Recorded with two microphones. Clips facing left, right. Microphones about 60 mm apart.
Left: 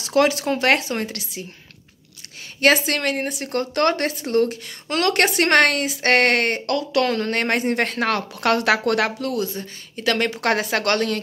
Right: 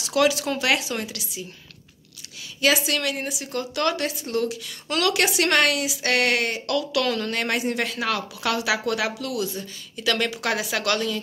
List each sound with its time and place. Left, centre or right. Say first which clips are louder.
0.0 s speech: left 3 dB; left
2.6 s a woman's voice: left 4 dB; left